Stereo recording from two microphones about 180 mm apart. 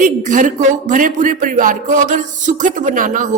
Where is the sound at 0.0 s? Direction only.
45° right (ahead or behind).